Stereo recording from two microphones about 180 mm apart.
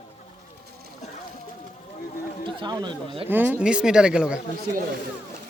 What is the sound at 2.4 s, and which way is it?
Speech, 25° right (ahead or behind).